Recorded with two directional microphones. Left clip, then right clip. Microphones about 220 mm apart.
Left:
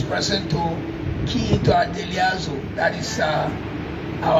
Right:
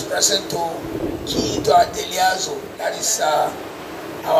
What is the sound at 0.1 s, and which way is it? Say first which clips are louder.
Speech: right 4 dB; 60° right (ahead or behind).